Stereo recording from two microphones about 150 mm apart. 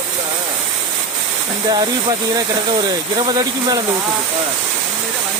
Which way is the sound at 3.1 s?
30° right (ahead or behind).